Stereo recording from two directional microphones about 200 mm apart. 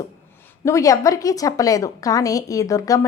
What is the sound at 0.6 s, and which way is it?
A woman's voice, 15° left (ahead or behind).